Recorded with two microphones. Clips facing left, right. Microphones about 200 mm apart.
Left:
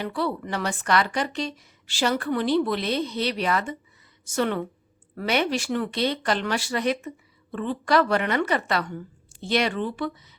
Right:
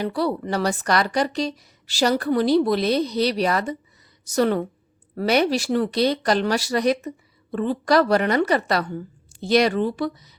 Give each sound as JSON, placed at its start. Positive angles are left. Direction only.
{"t": 0.0, "sound": "a woman's voice", "side_deg": -40}